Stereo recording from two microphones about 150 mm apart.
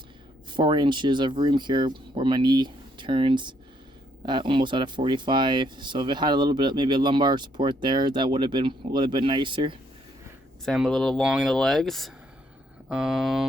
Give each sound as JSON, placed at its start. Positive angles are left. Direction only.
{"t": 0.5, "sound": "speech", "side_deg": -30}
{"t": 10.7, "sound": "speech", "side_deg": 0}